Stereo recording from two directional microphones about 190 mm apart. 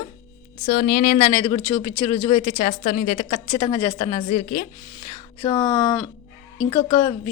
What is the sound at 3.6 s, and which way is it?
A woman's voice, 30° left (ahead or behind).